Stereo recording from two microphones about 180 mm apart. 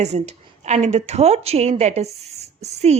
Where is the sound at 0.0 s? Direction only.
40° right (ahead or behind).